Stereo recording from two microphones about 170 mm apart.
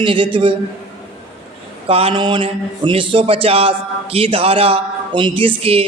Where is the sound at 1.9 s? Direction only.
35° right (ahead or behind).